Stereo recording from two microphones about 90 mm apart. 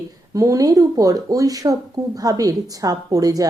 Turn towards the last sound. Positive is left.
turn(degrees=-40)  # may be behind; listen again after turning